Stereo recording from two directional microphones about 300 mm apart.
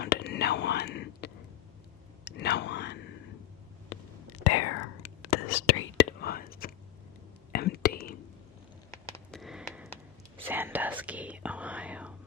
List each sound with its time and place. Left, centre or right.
0.0 s whispering: left
4.4 s whispering: left
6.0 s whispering: left
9.0 s a sound: centre
10.4 s whispering: centre